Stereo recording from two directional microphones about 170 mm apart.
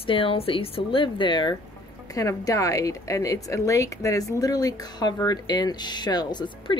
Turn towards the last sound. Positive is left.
turn(degrees=25)  # may be behind; listen again after turning